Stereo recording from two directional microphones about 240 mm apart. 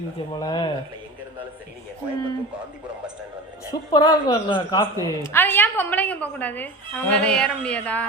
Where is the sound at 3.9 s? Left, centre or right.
Centre.